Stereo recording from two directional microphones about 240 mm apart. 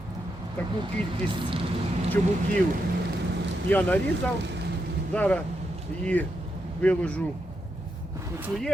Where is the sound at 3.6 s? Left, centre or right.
Centre.